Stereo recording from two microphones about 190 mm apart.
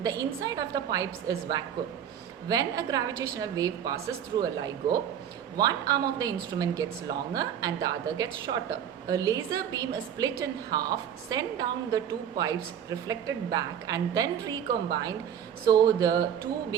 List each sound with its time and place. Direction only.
0.0 s a woman's voice: 20° right (ahead or behind)